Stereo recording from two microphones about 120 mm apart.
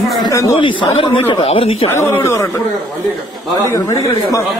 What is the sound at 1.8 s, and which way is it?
Speech, 20° left (ahead or behind).